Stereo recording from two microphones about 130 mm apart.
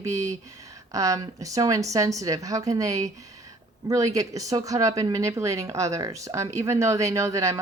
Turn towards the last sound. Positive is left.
turn(degrees=-25)  # may be behind; listen again after turning